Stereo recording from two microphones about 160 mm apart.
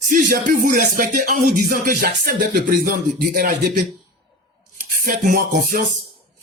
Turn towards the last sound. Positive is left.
turn(degrees=-65)  # may be behind; listen again after turning